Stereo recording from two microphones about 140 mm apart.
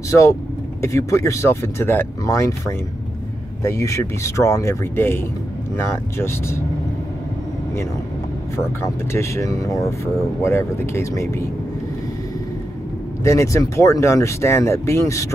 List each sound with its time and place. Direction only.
0.1 s speech: 20° left (ahead or behind)
8.5 s speech: 20° left (ahead or behind)
13.2 s speech: 20° left (ahead or behind)